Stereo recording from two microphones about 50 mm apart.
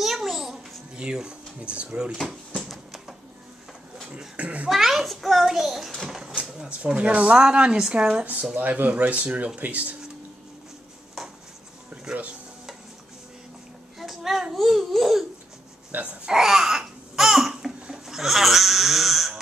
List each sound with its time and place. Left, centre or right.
0.0 s a sound: centre
0.9 s speech: centre
2.5 s a sound: centre
4.4 s speech: right
4.6 s a child's voice: centre
6.6 s speech: centre
7.3 s a woman's voice: centre
8.5 s speech: right
13.9 s babbling: centre
15.9 s wail: right
16.3 s babbling: centre
17.9 s crying: centre